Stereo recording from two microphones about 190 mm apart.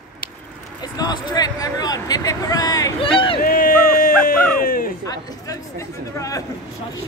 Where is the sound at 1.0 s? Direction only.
20° left (ahead or behind).